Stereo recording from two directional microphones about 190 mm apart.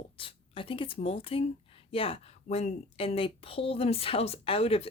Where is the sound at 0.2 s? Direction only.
30° left (ahead or behind).